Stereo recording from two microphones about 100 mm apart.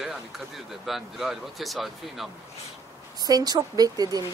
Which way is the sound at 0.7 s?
Centre (ahead or behind).